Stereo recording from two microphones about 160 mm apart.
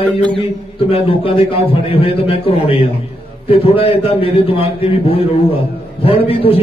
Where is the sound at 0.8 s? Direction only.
35° left (ahead or behind).